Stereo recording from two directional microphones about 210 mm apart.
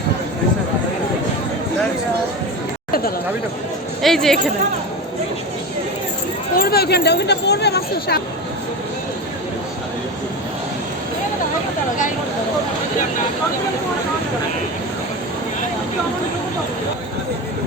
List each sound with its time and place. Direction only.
4.0 s speech: centre (ahead or behind)
6.6 s speech: 50° left (ahead or behind)